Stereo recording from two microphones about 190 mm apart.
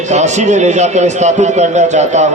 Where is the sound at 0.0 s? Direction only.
40° right (ahead or behind).